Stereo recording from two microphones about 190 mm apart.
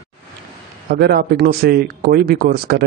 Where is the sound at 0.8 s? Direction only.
55° right (ahead or behind).